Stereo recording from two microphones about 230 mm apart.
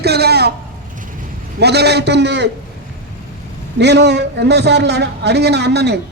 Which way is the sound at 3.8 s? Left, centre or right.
Right.